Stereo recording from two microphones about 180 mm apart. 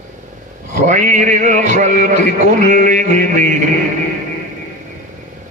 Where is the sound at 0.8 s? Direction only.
40° right (ahead or behind).